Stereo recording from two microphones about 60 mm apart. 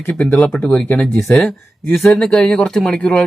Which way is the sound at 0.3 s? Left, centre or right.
Centre.